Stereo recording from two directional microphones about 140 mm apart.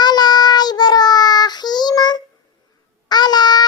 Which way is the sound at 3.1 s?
30° left (ahead or behind).